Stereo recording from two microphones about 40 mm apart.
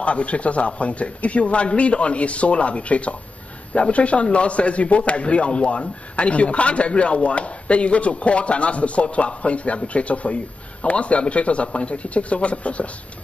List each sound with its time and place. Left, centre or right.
0.0 s a man's voice: left